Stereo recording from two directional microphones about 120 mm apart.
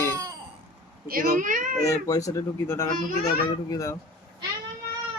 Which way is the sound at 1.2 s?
90° right.